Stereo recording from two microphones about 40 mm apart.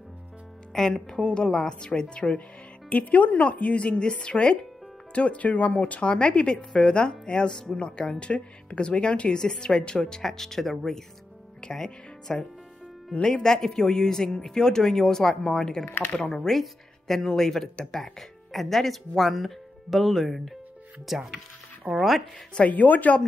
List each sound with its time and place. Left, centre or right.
0.7 s speech: centre
2.9 s a woman's voice: left; by 22.0 s centre
22.7 s a woman's voice: left